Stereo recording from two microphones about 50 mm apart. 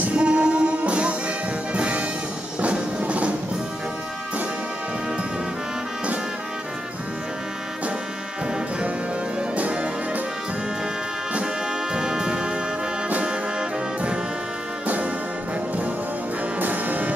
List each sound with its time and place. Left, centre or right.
0.1 s music: centre
9.6 s music: right
11.9 s brass instrument: centre
16.5 s music: right